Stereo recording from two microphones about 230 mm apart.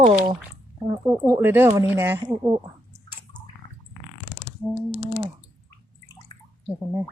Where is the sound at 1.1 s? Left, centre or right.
Centre.